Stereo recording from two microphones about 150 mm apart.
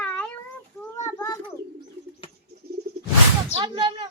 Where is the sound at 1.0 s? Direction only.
25° left (ahead or behind).